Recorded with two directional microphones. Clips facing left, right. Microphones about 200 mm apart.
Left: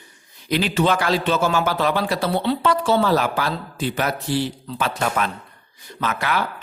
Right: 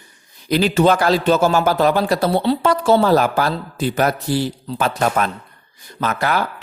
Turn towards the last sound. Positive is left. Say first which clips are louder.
# right 4 dB
turn(degrees=-40)  # may be behind; listen again after turning